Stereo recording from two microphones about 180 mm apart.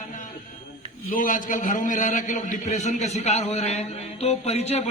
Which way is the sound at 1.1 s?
50° left (ahead or behind).